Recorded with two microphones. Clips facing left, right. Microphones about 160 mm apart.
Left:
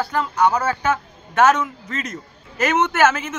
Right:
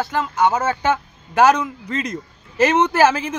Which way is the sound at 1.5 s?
35° right (ahead or behind).